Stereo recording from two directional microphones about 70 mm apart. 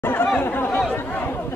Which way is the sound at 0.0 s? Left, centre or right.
Left.